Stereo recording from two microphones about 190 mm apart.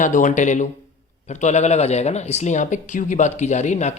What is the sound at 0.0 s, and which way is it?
Speech, 40° left (ahead or behind).